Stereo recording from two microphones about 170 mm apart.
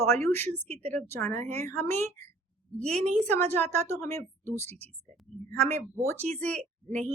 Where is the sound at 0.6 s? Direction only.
40° right (ahead or behind).